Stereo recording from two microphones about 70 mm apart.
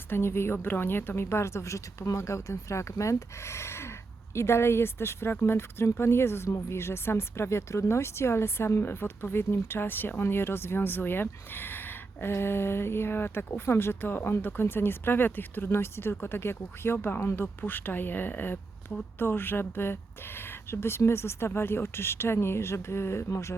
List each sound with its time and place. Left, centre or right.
0.1 s speech: left